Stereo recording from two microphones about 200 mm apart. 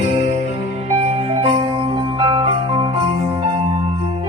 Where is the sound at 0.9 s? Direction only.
35° right (ahead or behind).